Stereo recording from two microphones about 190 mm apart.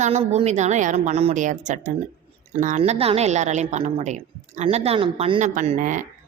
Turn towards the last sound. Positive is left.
turn(degrees=-45)  # may be behind; listen again after turning